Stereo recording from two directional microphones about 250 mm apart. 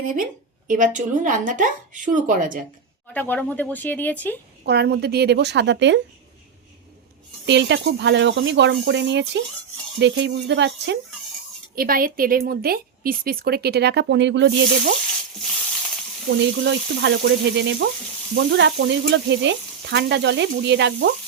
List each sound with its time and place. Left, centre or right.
0.7 s a woman's voice: right
3.1 s speech: centre
4.6 s a woman's voice: right
7.4 s frying: right
11.7 s a woman's voice: right
16.4 s frying: right